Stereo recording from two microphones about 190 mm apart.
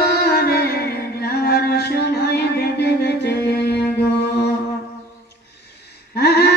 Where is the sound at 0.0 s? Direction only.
55° left (ahead or behind).